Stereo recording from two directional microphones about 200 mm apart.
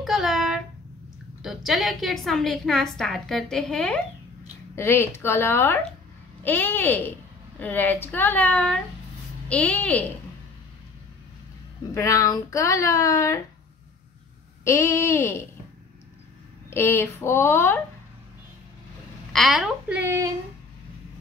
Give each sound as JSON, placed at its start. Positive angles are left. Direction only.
{"t": 0.0, "sound": "a sound", "side_deg": 0}
{"t": 1.4, "sound": "a woman's voice", "side_deg": 0}
{"t": 11.9, "sound": "speech", "side_deg": 15}
{"t": 14.6, "sound": "speech", "side_deg": 15}
{"t": 16.7, "sound": "speech", "side_deg": 10}
{"t": 19.3, "sound": "a woman's voice", "side_deg": 0}